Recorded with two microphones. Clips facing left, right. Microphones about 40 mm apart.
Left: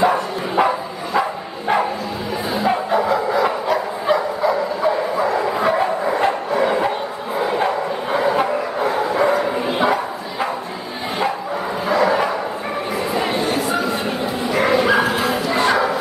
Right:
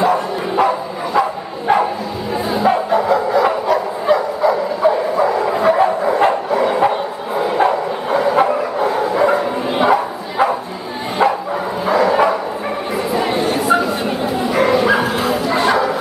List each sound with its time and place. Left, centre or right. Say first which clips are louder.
0.0 s bow-wow: right 2 dB; centre
2.5 s bow-wow: right 3 dB; centre
11.8 s bow-wow: right 4 dB; centre
13.1 s chatter: right 3 dB; centre
13.7 s bow-wow: right 3 dB; centre